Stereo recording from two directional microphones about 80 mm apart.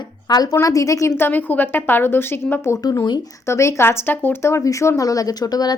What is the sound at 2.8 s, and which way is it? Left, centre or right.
A woman's voice, left.